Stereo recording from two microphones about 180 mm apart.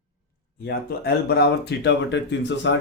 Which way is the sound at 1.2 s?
65° left (ahead or behind).